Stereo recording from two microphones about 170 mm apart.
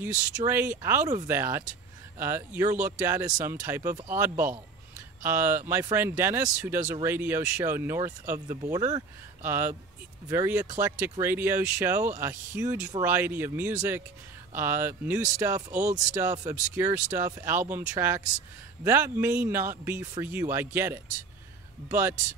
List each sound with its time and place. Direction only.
0.0 s speech: 15° right (ahead or behind)
15.7 s speech: 50° right (ahead or behind)
16.2 s speech: 15° right (ahead or behind)